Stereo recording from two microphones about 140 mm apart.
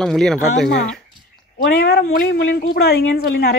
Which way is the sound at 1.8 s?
90° left.